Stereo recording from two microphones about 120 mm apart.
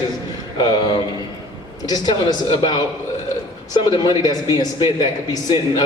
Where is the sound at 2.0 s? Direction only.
40° left (ahead or behind).